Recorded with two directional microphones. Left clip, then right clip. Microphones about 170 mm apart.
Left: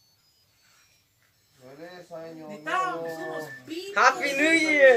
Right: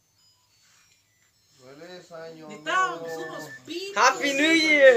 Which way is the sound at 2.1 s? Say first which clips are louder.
Left 2 dB; 60° right (ahead or behind).